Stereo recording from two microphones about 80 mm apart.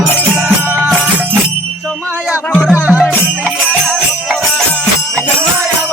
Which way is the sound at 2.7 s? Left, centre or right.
Centre.